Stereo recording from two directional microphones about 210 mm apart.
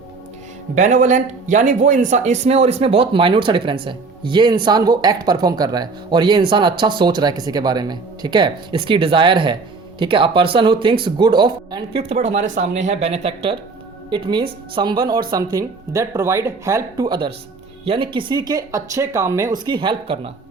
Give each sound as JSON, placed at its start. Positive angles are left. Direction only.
{"t": 0.8, "sound": "speech", "side_deg": -35}